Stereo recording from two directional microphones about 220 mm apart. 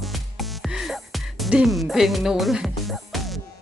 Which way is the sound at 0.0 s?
Centre (ahead or behind).